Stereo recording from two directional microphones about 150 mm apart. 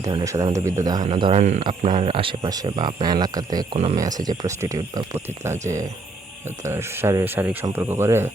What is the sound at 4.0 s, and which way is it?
Speech, 25° right (ahead or behind).